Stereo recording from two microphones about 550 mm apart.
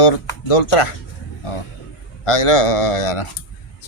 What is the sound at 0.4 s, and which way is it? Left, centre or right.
Speech, left.